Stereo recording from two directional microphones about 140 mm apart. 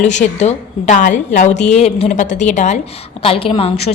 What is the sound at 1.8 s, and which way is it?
A woman's voice, 50° left (ahead or behind).